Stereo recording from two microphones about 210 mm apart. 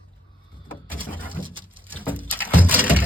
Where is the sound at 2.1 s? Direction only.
10° right (ahead or behind).